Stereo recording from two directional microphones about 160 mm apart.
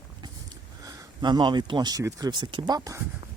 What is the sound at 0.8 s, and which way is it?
Speech, 25° right (ahead or behind).